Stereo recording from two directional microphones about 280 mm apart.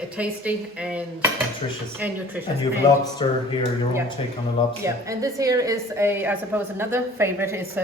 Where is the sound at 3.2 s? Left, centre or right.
Centre.